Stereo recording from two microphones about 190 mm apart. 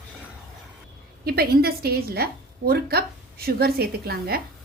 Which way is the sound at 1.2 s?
55° right (ahead or behind).